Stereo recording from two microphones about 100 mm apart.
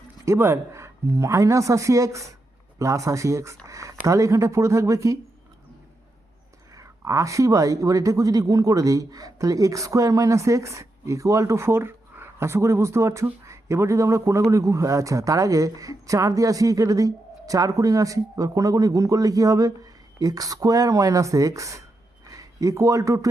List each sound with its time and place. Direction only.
0.3 s speech: 25° right (ahead or behind)
6.7 s speech: 30° right (ahead or behind)